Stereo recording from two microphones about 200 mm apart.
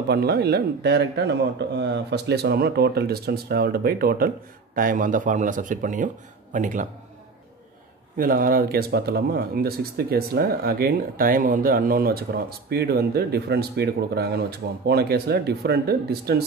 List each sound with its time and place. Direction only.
0.1 s speech: 50° right (ahead or behind)
8.2 s speech: 45° right (ahead or behind)